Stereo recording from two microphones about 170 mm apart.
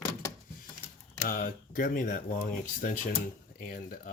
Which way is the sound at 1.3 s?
60° left (ahead or behind).